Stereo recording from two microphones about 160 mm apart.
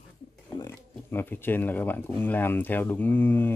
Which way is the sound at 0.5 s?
15° left (ahead or behind).